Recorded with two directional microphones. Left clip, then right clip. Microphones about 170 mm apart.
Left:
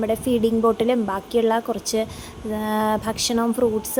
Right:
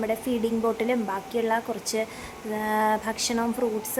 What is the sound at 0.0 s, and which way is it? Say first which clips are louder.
Speech: left 6 dB; 25° left (ahead or behind).